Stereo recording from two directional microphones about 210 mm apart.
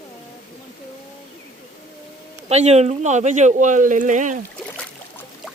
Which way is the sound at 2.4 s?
30° right (ahead or behind).